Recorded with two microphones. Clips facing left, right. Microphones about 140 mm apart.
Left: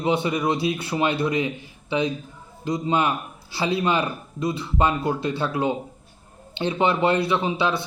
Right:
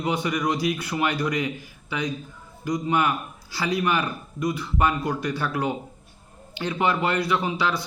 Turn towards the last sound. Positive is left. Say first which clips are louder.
# left 2 dB
turn(degrees=25)  # may be behind; listen again after turning